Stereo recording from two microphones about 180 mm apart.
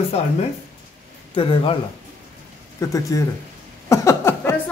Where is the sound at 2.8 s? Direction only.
20° left (ahead or behind).